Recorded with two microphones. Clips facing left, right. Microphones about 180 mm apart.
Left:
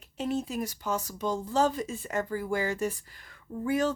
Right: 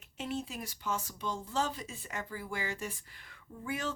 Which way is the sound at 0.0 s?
40° left (ahead or behind).